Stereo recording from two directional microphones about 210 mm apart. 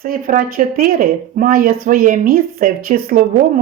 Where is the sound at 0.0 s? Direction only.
40° right (ahead or behind).